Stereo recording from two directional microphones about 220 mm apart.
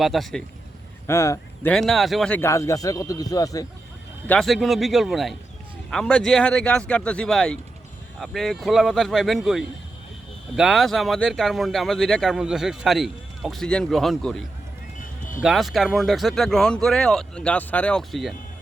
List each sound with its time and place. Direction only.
0.0 s speech: centre (ahead or behind)
1.0 s speech: 15° left (ahead or behind)
4.3 s speech: centre (ahead or behind)